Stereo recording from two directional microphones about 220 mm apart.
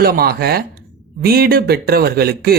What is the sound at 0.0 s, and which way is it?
Speech, 45° right (ahead or behind).